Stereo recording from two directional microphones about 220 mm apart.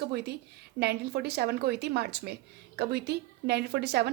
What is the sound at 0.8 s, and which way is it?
A woman's voice, 50° right (ahead or behind).